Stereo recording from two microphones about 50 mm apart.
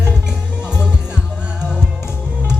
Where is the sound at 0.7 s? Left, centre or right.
Right.